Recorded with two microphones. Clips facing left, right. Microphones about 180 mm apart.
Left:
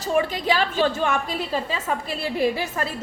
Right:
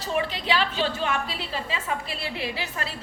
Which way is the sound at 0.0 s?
45° left (ahead or behind).